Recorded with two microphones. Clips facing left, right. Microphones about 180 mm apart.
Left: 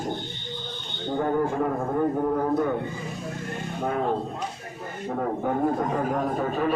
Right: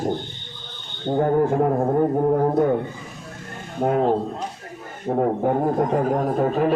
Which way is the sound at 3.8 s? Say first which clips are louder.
Right 7 dB; 50° right (ahead or behind).